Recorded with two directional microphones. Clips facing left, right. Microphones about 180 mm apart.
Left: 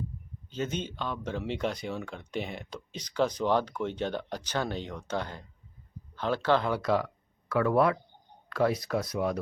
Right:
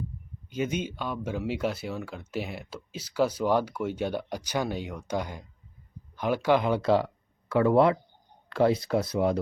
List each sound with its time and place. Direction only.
0.5 s speech: 10° right (ahead or behind); by 9.4 s 30° right (ahead or behind)